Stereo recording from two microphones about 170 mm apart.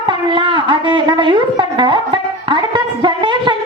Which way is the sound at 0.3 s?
30° right (ahead or behind).